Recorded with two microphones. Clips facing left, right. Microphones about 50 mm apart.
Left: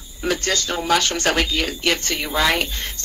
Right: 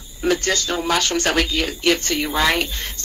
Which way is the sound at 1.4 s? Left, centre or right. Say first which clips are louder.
Right 1 dB; centre.